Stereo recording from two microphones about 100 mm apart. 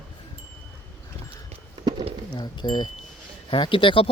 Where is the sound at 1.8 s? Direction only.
40° right (ahead or behind).